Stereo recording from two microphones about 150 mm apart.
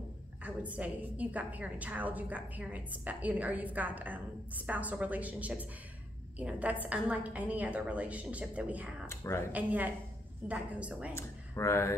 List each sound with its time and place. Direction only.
0.4 s a woman's voice: 10° right (ahead or behind)
9.0 s speech: 15° left (ahead or behind)
9.5 s a woman's voice: 10° right (ahead or behind)
11.1 s speech: 20° left (ahead or behind)